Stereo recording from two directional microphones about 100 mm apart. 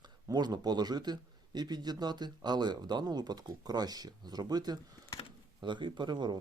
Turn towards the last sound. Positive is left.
turn(degrees=-45)  # may be behind; listen again after turning